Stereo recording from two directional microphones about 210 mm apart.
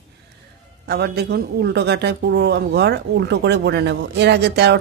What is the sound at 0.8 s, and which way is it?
A woman's voice, 50° right (ahead or behind).